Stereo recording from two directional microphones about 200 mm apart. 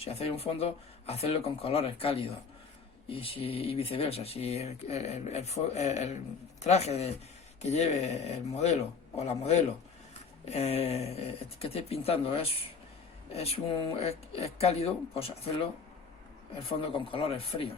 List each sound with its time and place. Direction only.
0.0 s speech: 30° left (ahead or behind)